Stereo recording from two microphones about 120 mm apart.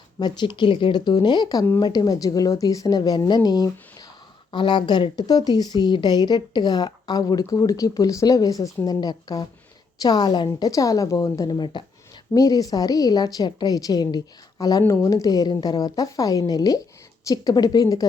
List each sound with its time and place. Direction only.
0.2 s a woman's voice: 40° left (ahead or behind)